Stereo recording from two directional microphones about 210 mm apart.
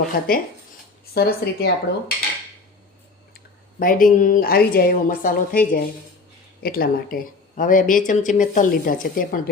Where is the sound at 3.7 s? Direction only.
40° left (ahead or behind).